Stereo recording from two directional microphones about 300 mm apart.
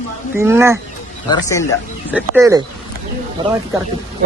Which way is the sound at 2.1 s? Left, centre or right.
Centre.